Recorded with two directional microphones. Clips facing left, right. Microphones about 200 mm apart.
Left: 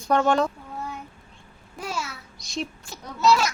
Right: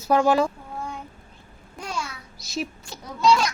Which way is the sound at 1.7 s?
5° left (ahead or behind).